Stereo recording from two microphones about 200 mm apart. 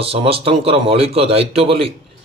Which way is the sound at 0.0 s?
30° right (ahead or behind).